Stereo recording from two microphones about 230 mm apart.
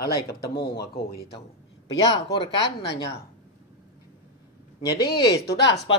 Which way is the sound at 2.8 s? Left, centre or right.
Left.